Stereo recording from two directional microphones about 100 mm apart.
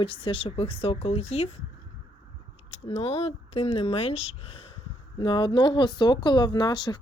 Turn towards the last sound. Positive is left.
turn(degrees=45)  # may be behind; listen again after turning